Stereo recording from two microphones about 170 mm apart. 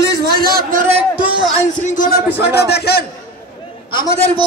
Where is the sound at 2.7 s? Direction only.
70° left (ahead or behind).